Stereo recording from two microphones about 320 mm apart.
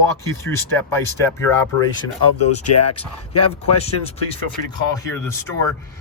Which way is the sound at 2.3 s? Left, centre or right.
Left.